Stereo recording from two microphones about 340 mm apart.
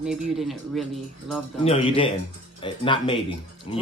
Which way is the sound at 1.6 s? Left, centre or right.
Centre.